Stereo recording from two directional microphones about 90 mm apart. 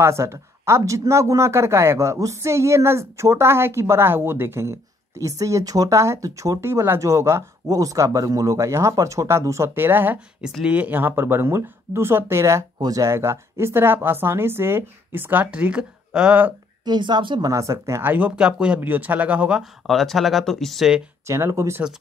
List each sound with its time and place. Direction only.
0.0 s speech: 30° right (ahead or behind)
10.4 s speech: 10° right (ahead or behind); by 12.6 s 30° right (ahead or behind)
12.7 s speech: 45° right (ahead or behind); by 16.5 s 15° right (ahead or behind)
16.8 s speech: 55° right (ahead or behind)
17.5 s speech: 35° right (ahead or behind)
18.1 s speech: 15° right (ahead or behind)
19.9 s speech: centre (ahead or behind)
21.3 s speech: 35° right (ahead or behind)